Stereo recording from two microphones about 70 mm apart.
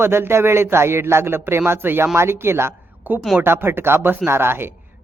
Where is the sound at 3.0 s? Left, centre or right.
Right.